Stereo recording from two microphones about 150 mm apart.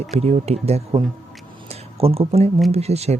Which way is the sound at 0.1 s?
45° right (ahead or behind).